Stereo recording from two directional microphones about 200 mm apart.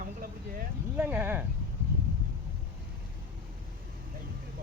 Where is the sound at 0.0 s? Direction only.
45° right (ahead or behind).